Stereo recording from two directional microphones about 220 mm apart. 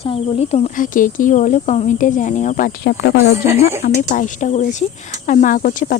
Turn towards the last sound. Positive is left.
turn(degrees=35)  # may be behind; listen again after turning